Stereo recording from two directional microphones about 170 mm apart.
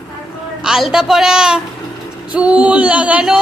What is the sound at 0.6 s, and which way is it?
A woman's voice, centre (ahead or behind).